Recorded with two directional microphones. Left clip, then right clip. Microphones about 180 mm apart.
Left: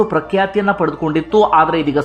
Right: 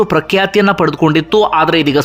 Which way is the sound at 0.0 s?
25° right (ahead or behind).